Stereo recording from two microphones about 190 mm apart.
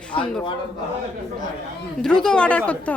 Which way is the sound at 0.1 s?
25° left (ahead or behind).